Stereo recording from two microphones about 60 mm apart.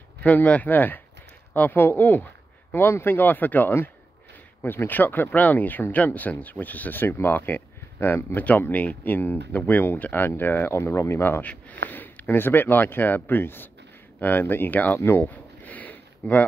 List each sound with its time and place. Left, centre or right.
0.2 s speech: left
10.7 s speech: left
11.4 s speech: left
15.0 s a sound: left